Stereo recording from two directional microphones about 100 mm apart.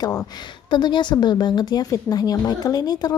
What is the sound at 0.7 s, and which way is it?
A woman's voice, 50° left (ahead or behind).